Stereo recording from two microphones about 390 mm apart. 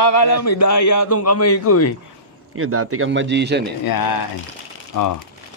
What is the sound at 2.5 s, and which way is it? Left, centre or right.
A man's voice, right.